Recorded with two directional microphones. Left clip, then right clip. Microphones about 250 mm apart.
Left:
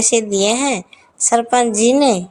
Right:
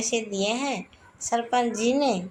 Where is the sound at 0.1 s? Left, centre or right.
Left.